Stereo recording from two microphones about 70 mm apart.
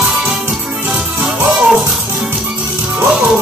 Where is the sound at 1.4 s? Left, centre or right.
Centre.